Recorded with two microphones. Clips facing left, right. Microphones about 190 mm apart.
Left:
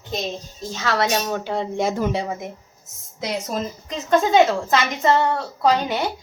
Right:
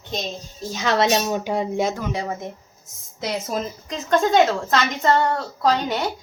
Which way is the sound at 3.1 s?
Centre (ahead or behind).